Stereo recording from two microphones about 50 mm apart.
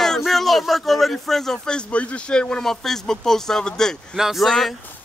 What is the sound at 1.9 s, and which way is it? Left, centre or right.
Speech, left.